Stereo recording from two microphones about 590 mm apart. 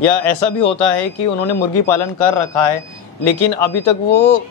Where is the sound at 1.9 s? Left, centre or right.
Left.